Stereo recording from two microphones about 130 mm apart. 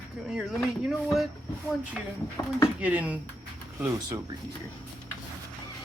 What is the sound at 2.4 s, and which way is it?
Speech, 20° left (ahead or behind).